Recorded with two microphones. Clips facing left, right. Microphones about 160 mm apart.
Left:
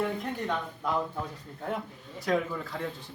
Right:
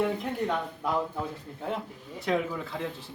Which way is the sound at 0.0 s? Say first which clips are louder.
Right 3 dB; 5° right (ahead or behind).